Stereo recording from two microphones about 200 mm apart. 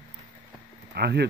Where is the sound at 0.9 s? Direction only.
55° right (ahead or behind).